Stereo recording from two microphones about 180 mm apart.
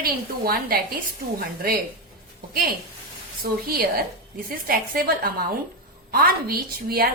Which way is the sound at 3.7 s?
55° right (ahead or behind).